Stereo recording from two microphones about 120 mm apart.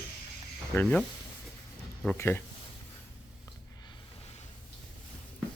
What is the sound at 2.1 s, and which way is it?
Speech, 20° left (ahead or behind).